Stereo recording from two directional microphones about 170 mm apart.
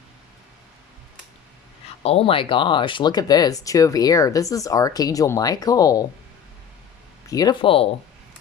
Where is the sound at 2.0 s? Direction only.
35° left (ahead or behind).